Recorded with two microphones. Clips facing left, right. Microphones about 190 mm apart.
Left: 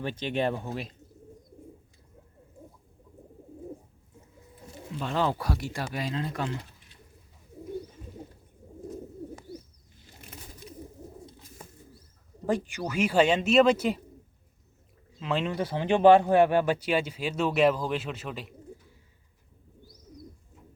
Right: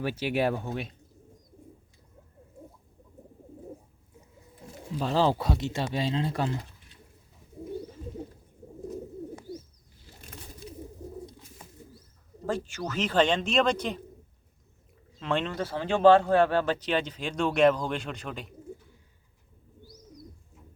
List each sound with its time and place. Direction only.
0.0 s speech: 10° right (ahead or behind)
4.9 s speech: 35° right (ahead or behind)
12.5 s speech: 15° left (ahead or behind)
15.2 s speech: 5° left (ahead or behind)
15.5 s speech: 15° left (ahead or behind)